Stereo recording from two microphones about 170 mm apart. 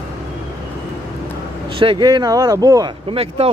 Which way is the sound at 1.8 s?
30° right (ahead or behind).